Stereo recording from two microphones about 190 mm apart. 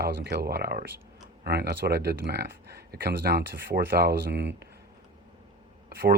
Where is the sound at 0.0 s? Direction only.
60° right (ahead or behind).